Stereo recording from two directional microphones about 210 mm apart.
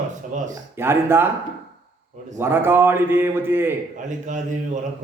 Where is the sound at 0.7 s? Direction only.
10° right (ahead or behind).